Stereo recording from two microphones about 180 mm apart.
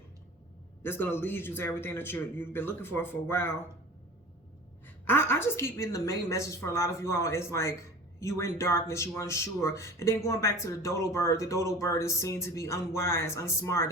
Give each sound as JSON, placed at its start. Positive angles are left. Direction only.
{"t": 0.8, "sound": "speech", "side_deg": 10}
{"t": 5.0, "sound": "speech", "side_deg": 15}